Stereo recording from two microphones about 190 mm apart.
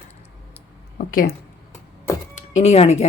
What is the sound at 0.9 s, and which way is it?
Speech, 50° left (ahead or behind).